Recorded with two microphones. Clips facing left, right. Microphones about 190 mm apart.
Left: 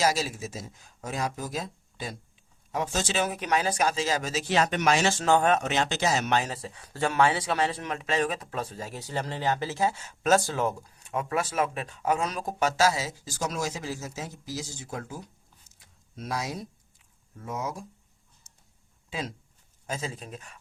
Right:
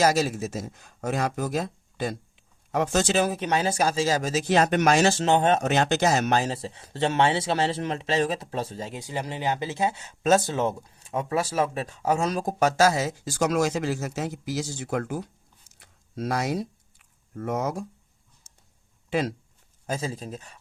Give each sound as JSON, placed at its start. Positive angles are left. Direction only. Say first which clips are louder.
{"t": 0.0, "sound": "speech", "louder": "right 5 dB", "side_deg": -50}
{"t": 3.2, "sound": "speech", "louder": "right 3 dB", "side_deg": -30}
{"t": 5.1, "sound": "speech", "louder": "right 2 dB", "side_deg": -20}
{"t": 5.5, "sound": "speech", "louder": "right 5 dB", "side_deg": -45}
{"t": 9.0, "sound": "speech", "louder": "even", "side_deg": -15}
{"t": 15.8, "sound": "a sound", "louder": "right 9 dB", "side_deg": -80}
{"t": 19.9, "sound": "speech", "louder": "right 4 dB", "side_deg": -35}